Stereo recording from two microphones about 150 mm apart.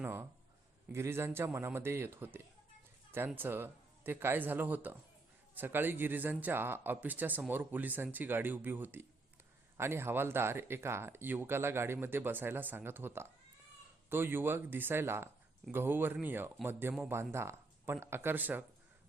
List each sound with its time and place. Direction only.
0.0 s speech: 15° right (ahead or behind)